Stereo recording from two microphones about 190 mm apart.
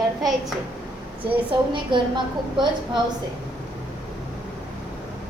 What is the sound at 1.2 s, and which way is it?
Speech, 25° right (ahead or behind).